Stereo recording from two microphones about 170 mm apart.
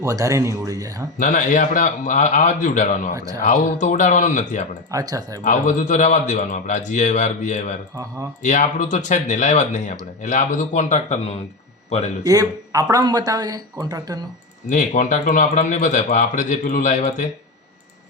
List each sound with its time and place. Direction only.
0.0 s speech: 20° right (ahead or behind)
1.2 s speech: 45° left (ahead or behind)
4.9 s speech: 20° right (ahead or behind)
5.4 s speech: 45° left (ahead or behind)
12.2 s speech: 20° right (ahead or behind)
14.7 s speech: 45° left (ahead or behind)